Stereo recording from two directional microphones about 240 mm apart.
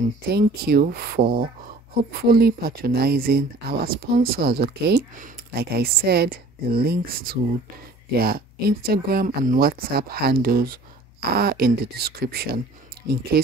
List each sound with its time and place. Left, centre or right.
0.3 s speech: right